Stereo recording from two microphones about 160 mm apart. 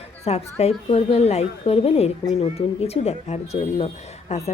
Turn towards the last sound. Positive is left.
turn(degrees=40)  # may be behind; listen again after turning